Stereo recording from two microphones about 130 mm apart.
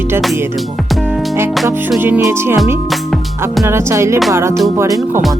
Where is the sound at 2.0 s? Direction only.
15° right (ahead or behind).